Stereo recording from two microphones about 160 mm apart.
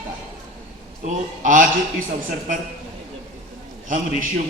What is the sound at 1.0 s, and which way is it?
Speech, 55° right (ahead or behind).